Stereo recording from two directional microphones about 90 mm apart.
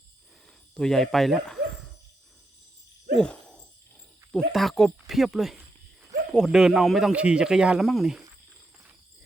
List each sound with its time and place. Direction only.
0.7 s speech: 5° left (ahead or behind)
3.2 s a sound: 10° left (ahead or behind)
4.3 s speech: 5° left (ahead or behind)